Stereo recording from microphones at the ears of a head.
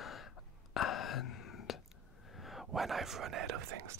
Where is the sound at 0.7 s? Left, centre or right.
Left.